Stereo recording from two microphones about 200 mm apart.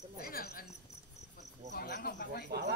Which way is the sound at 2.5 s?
50° right (ahead or behind).